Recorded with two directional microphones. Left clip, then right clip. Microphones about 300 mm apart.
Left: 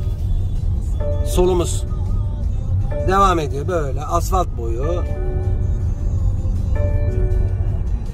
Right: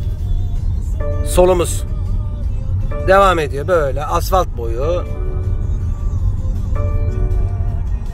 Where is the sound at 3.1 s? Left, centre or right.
Centre.